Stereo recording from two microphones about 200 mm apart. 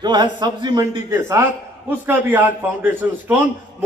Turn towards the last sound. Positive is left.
turn(degrees=-10)  # may be behind; listen again after turning